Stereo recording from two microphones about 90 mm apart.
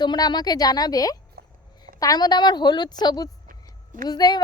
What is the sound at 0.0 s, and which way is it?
Speech, 55° left (ahead or behind).